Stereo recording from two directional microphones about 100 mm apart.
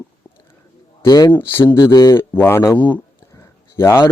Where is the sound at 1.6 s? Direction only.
40° left (ahead or behind).